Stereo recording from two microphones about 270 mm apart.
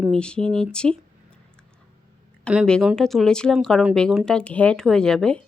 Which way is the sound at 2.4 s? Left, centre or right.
Centre.